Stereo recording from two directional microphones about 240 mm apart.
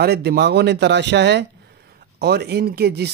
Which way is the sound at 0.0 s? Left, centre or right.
Right.